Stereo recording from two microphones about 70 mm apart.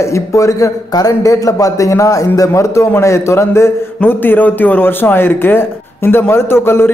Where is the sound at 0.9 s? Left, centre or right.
Left.